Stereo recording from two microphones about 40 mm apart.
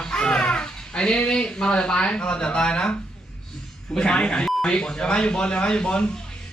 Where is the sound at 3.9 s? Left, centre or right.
Left.